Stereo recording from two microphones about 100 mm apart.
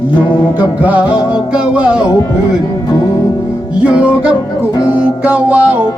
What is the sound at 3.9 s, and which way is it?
Music, 10° right (ahead or behind).